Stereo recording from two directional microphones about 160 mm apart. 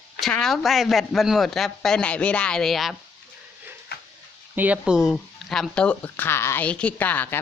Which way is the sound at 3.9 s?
90° left.